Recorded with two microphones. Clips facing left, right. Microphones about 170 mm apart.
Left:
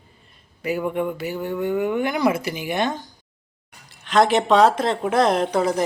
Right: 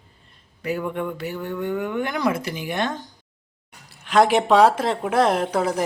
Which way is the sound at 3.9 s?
10° right (ahead or behind).